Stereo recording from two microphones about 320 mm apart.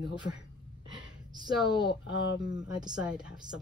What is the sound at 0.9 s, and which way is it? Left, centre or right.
Gasp, centre.